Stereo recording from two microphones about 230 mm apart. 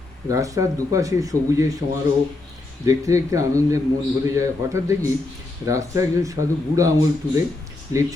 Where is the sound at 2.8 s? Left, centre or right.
Centre.